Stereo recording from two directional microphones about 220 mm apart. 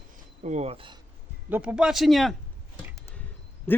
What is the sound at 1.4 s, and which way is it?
Speech, 5° right (ahead or behind).